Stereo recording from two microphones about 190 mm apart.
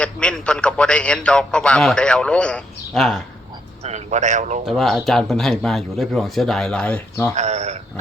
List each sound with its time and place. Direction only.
0.0 s a man's voice: 5° left (ahead or behind)
3.8 s a man's voice: 40° right (ahead or behind)
4.6 s a man's voice: centre (ahead or behind)
7.3 s a man's voice: 35° right (ahead or behind)